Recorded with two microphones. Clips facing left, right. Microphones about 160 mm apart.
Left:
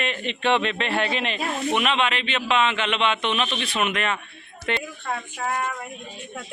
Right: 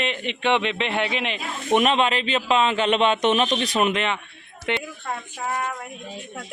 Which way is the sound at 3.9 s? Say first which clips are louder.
Right 1 dB; 20° right (ahead or behind).